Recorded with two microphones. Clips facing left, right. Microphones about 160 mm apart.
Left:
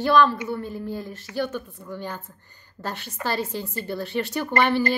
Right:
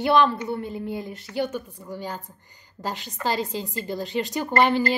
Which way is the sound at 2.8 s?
15° right (ahead or behind).